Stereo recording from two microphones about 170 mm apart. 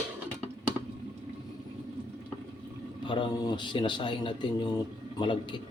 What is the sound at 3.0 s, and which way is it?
Speech, 30° left (ahead or behind).